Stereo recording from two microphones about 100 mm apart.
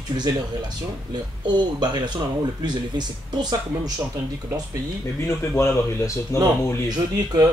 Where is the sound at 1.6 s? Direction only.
45° right (ahead or behind).